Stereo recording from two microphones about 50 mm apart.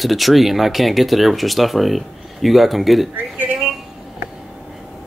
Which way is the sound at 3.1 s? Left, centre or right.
Right.